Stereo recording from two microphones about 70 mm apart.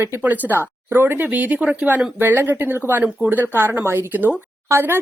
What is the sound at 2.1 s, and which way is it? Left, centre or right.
Speech, right.